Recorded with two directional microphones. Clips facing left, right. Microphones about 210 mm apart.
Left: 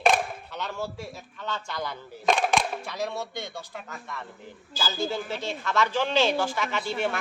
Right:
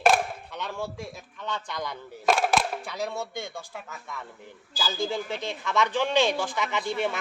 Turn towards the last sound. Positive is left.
turn(degrees=-15)  # may be behind; listen again after turning